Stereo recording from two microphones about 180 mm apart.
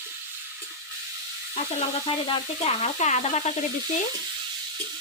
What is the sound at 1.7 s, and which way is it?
Stir, 35° left (ahead or behind).